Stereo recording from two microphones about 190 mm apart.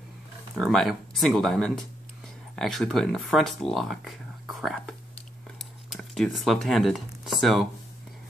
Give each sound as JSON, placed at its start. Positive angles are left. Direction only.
{"t": 0.6, "sound": "speech", "side_deg": 0}